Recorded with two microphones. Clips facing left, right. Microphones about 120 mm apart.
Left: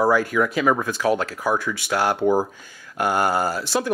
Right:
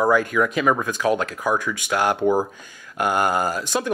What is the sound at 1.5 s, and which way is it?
Speech, 15° right (ahead or behind).